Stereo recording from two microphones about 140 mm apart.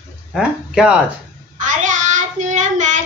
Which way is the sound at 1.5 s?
65° right (ahead or behind).